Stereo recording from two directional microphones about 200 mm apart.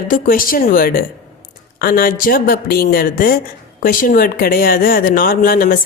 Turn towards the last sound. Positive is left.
turn(degrees=45)  # may be behind; listen again after turning